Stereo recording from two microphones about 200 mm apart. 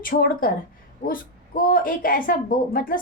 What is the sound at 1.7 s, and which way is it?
A woman's voice, 45° left (ahead or behind).